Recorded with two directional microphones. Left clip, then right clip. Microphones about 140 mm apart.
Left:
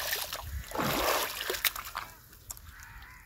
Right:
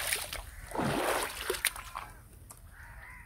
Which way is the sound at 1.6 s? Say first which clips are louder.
Left 2 dB; 90° left.